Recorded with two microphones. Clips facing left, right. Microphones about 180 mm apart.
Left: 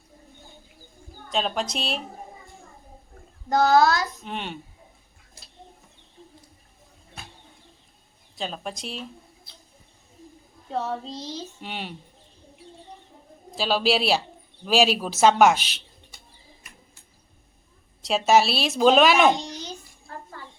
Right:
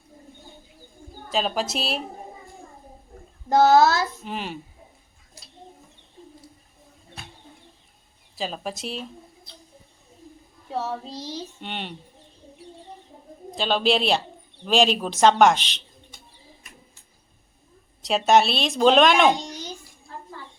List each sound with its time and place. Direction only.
1.3 s a woman's voice: 5° right (ahead or behind)
3.5 s speech: 25° right (ahead or behind)
4.2 s a woman's voice: centre (ahead or behind)
8.4 s speech: centre (ahead or behind)
10.8 s child singing: 10° right (ahead or behind)
11.6 s a woman's voice: 5° left (ahead or behind)
13.6 s a woman's voice: 5° left (ahead or behind)
18.0 s a woman's voice: centre (ahead or behind)